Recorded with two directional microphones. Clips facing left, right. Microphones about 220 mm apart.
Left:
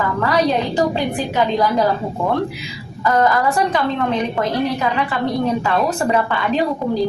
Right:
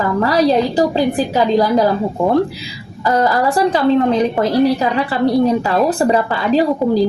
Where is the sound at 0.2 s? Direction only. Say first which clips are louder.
Right 5 dB; 35° right (ahead or behind).